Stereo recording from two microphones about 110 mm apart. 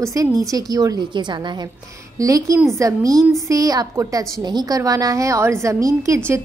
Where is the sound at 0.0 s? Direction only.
30° right (ahead or behind).